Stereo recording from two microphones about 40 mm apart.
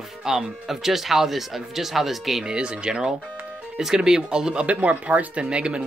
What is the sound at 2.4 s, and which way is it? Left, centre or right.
Speech, right.